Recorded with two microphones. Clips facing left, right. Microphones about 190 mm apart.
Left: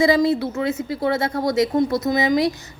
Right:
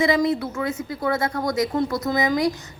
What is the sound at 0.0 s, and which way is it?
A woman's voice, 30° left (ahead or behind).